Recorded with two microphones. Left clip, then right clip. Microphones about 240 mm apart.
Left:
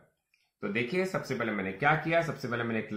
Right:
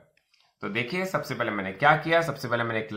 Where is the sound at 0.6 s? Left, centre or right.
Centre.